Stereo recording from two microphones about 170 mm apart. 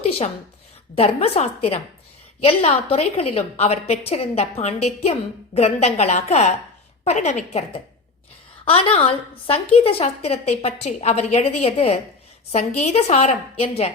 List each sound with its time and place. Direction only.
0.9 s a woman's voice: 35° left (ahead or behind)